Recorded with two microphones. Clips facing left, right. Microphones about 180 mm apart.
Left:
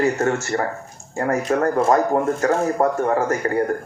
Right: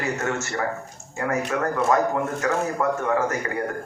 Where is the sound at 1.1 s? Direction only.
35° left (ahead or behind).